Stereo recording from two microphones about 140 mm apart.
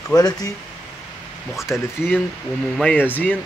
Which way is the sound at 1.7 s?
15° left (ahead or behind).